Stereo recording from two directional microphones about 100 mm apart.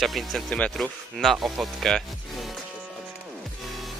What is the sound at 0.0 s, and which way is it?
Speech, centre (ahead or behind).